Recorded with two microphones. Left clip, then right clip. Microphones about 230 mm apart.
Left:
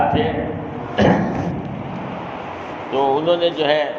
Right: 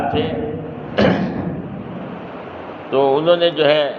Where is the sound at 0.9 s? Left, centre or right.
Right.